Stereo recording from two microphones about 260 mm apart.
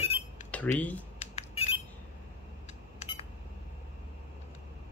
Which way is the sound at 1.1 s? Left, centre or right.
Left.